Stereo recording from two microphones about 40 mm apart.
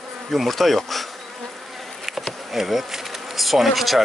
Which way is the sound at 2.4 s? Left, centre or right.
Centre.